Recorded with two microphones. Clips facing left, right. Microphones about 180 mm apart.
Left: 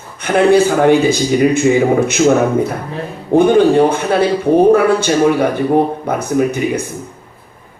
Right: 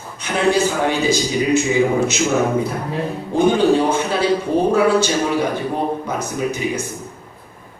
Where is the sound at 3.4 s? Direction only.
55° left (ahead or behind).